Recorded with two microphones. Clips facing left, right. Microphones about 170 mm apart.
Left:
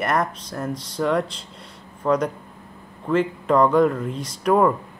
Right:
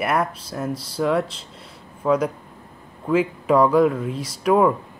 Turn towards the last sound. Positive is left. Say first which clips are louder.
# right 1 dB
turn(degrees=-5)  # may be behind; listen again after turning